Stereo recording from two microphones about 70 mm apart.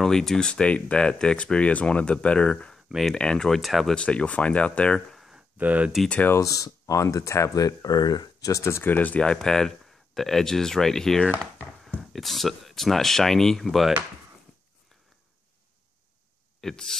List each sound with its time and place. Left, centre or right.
0.0 s speech: centre
2.9 s speech: centre
3.9 s speech: centre
5.6 s speech: right
6.4 s speech: left
8.5 s speech: left
8.8 s speech: left
9.2 s speech: centre
16.6 s speech: centre